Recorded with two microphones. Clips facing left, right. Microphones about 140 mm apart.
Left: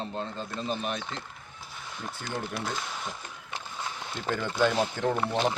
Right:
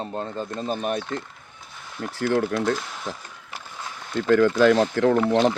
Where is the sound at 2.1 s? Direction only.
80° right.